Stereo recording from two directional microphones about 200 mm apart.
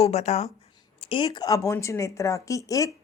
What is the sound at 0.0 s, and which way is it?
Speech, 30° left (ahead or behind).